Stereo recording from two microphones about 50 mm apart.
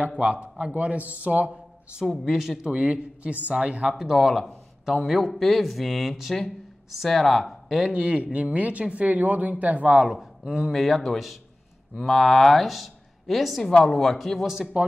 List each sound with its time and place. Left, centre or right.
0.0 s speech: right
2.0 s a man's voice: centre
2.3 s speech: centre; by 3.9 s right
4.0 s a man's voice: centre
7.9 s speech: right
10.0 s a man's voice: centre